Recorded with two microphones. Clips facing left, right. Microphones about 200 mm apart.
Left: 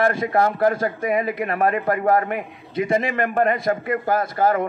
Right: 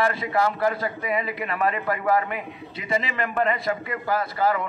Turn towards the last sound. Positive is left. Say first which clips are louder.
# left 4 dB
turn(degrees=50)  # may be behind; listen again after turning